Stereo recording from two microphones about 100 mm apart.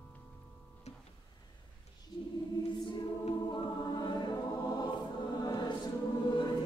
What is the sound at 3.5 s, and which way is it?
Choir, 50° left (ahead or behind).